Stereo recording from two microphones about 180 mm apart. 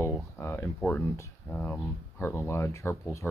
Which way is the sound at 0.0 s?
15° left (ahead or behind).